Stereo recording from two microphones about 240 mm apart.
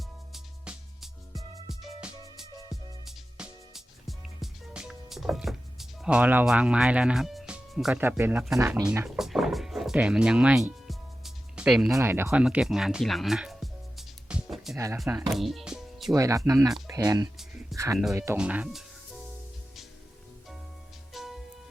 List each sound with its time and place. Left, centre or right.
0.3 s music: centre
3.3 s music: centre
6.0 s speech: centre
14.3 s music: centre
16.1 s speech: centre
16.6 s speech: centre
16.9 s speech: centre
17.3 s music: centre
18.1 s speech: centre
21.1 s music: centre